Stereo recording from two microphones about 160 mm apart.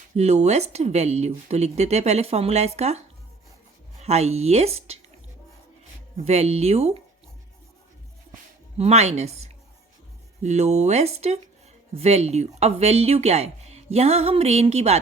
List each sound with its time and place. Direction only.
0.2 s speech: 45° right (ahead or behind)
4.0 s a woman's voice: 40° right (ahead or behind)
6.1 s a woman's voice: 40° right (ahead or behind)
8.8 s a woman's voice: 40° right (ahead or behind)